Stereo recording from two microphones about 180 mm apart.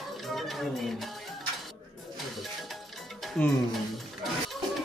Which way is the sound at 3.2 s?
Centre (ahead or behind).